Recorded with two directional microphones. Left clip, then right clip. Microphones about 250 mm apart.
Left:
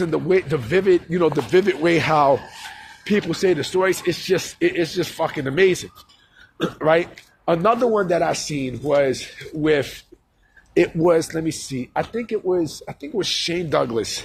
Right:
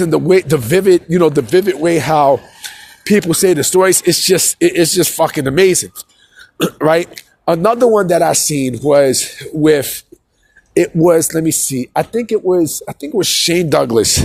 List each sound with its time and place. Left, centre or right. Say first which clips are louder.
0.0 s speech: right 8 dB; right
1.5 s speech: right 5 dB; right
3.0 s speech: right 8 dB; right